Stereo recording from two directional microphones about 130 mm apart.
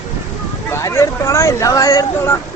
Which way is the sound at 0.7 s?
20° left (ahead or behind).